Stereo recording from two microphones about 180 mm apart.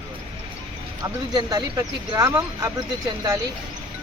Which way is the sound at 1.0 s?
20° right (ahead or behind).